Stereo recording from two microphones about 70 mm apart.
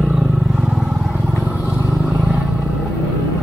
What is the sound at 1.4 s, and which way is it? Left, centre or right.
Vehicle, right.